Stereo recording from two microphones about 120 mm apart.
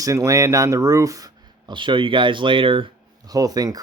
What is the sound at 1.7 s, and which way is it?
Speech, 45° right (ahead or behind).